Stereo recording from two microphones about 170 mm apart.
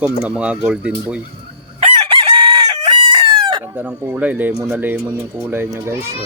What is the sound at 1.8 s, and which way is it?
Chicken, 30° right (ahead or behind).